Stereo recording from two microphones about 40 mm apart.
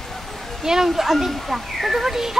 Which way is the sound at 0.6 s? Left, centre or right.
Centre.